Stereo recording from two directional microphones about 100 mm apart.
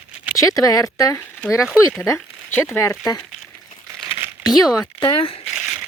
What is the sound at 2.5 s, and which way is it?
Speech, 25° left (ahead or behind).